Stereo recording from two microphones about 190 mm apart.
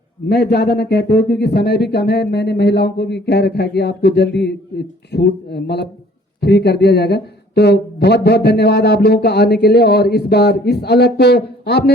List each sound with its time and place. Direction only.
0.3 s speech: 60° left (ahead or behind)